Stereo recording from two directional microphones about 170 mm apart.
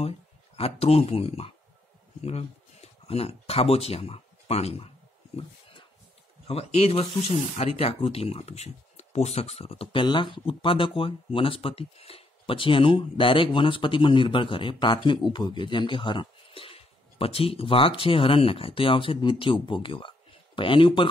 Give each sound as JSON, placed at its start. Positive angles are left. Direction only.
{"t": 0.6, "sound": "speech", "side_deg": 35}
{"t": 2.2, "sound": "a sound", "side_deg": 40}
{"t": 6.4, "sound": "speech", "side_deg": 35}